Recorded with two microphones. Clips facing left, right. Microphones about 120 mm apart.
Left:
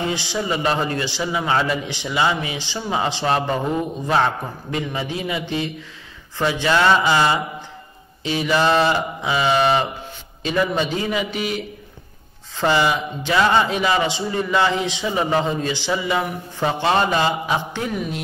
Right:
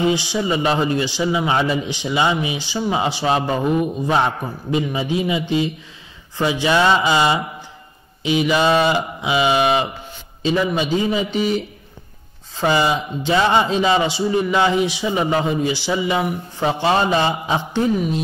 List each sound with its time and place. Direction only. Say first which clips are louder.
0.0 s a man's voice: right 5 dB; 15° right (ahead or behind)
11.1 s mantra: right 3 dB; 30° right (ahead or behind)
12.5 s a man's voice: right 1 dB; 15° right (ahead or behind)
16.8 s mantra: right 1 dB; 20° right (ahead or behind)